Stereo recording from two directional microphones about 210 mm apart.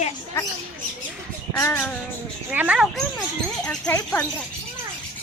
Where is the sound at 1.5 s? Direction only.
10° left (ahead or behind).